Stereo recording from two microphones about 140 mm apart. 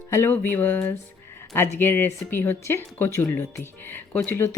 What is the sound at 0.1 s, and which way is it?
Speech, 15° left (ahead or behind).